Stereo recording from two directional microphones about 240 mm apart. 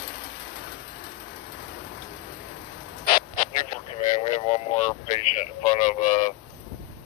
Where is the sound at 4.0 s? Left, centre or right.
Left.